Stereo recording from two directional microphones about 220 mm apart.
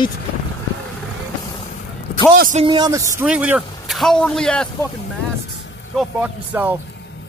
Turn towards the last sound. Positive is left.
turn(degrees=-5)  # may be behind; listen again after turning